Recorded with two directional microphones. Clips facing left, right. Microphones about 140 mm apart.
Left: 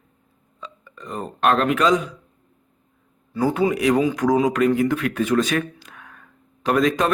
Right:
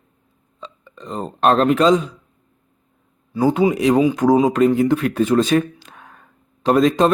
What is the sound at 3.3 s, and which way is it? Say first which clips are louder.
Speech: right 4 dB; 20° right (ahead or behind).